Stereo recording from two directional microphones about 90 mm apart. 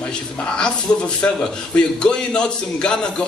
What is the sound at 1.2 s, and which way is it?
A man's voice, 15° left (ahead or behind).